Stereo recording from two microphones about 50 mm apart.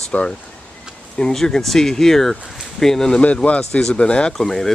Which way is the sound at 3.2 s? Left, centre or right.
Left.